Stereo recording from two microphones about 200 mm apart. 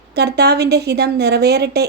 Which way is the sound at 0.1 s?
55° right (ahead or behind).